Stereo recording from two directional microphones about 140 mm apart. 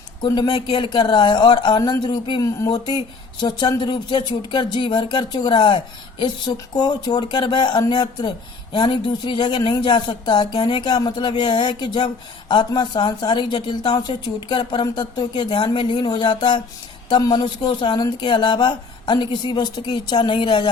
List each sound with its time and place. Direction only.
0.3 s speech: 30° left (ahead or behind)